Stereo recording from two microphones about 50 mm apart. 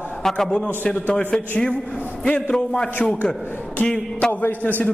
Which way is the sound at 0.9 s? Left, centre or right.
Left.